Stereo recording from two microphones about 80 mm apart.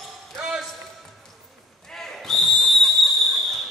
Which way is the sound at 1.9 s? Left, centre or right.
Centre.